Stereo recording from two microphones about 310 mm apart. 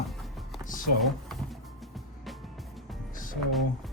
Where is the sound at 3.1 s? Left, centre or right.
Left.